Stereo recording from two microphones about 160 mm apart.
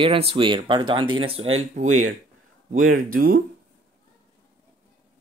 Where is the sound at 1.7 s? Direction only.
50° right (ahead or behind).